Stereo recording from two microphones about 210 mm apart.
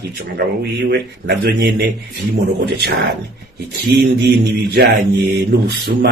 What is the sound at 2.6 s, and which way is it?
Speech, 50° right (ahead or behind).